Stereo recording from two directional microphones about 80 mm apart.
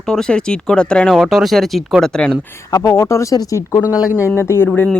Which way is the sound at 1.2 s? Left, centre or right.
Centre.